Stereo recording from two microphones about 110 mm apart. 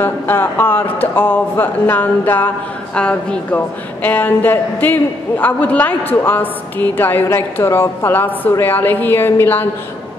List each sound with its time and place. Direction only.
0.0 s a man's voice: 20° left (ahead or behind)
1.1 s a sound: 20° left (ahead or behind)
5.4 s a man's voice: 15° left (ahead or behind)